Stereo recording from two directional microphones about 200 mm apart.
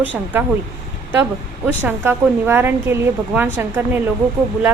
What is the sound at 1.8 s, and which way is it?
A woman's voice, 10° right (ahead or behind).